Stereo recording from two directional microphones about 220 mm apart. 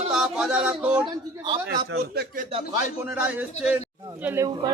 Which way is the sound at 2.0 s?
45° right (ahead or behind).